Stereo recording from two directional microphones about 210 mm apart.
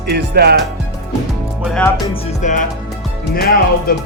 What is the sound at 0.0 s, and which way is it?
Speech, 50° right (ahead or behind).